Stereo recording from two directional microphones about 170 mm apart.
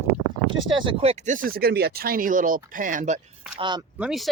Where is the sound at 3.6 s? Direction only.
25° right (ahead or behind).